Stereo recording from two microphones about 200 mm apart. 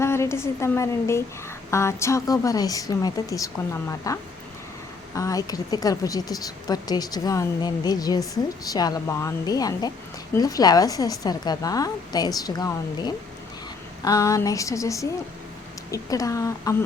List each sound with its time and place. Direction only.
0.0 s a woman's voice: 15° left (ahead or behind)